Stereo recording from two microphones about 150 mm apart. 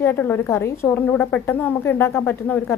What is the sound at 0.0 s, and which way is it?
A woman's voice, 15° left (ahead or behind).